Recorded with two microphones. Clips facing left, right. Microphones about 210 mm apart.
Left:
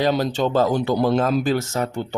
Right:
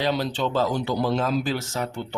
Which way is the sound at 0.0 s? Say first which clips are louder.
Left 5 dB; 45° left (ahead or behind).